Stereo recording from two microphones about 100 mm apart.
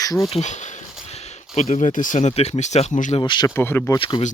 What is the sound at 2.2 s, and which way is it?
Speech, 90° left.